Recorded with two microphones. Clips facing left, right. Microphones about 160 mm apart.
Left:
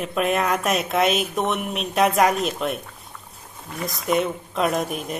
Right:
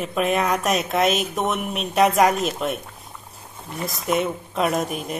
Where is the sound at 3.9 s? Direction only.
Centre (ahead or behind).